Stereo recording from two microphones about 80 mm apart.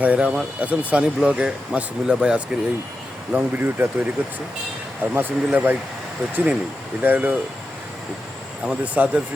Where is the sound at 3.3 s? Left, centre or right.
Right.